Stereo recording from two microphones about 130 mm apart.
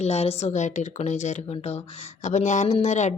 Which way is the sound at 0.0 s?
55° left (ahead or behind).